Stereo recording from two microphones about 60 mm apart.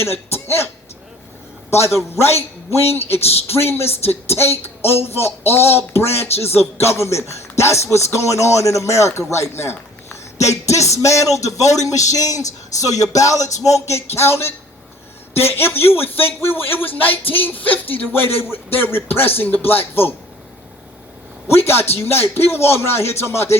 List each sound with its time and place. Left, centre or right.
0.0 s speech: left
2.9 s a man's voice: left
13.0 s a sound: left
13.9 s speech: left
21.4 s speech: left